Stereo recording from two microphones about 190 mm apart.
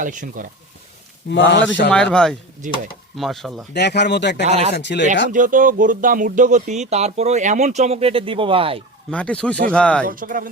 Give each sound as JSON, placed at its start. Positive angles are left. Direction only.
{"t": 0.0, "sound": "speech", "side_deg": -45}
{"t": 1.3, "sound": "a man's voice", "side_deg": 70}
{"t": 1.9, "sound": "speech", "side_deg": 5}
{"t": 3.8, "sound": "speech", "side_deg": 60}
{"t": 4.4, "sound": "speech", "side_deg": -35}
{"t": 4.7, "sound": "speech", "side_deg": 65}
{"t": 5.3, "sound": "speech", "side_deg": -45}
{"t": 9.0, "sound": "speech", "side_deg": 5}
{"t": 10.1, "sound": "speech", "side_deg": -45}